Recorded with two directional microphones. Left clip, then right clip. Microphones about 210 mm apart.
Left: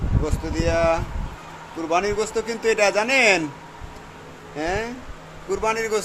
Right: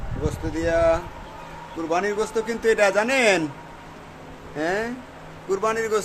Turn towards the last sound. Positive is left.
turn(degrees=-10)  # may be behind; listen again after turning